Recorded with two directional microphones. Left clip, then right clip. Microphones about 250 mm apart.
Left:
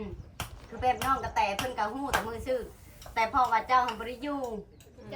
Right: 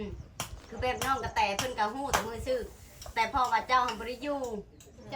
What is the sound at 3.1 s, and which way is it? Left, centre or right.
Speech, centre.